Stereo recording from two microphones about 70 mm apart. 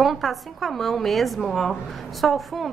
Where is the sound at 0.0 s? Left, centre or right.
Centre.